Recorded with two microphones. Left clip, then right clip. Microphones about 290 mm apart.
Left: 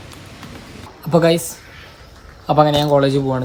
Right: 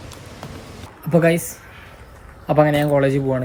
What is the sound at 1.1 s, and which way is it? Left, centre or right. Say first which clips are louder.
Speech: left 2 dB; centre.